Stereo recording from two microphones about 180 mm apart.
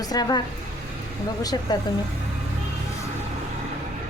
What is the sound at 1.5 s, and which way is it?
Speech, 20° left (ahead or behind).